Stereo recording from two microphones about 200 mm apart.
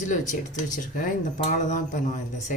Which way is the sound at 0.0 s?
40° left (ahead or behind).